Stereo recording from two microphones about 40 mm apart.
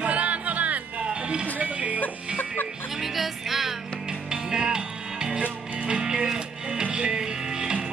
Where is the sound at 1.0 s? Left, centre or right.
Right.